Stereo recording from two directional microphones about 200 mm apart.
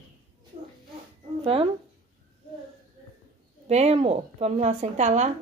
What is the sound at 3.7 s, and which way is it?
A woman's voice, 30° right (ahead or behind).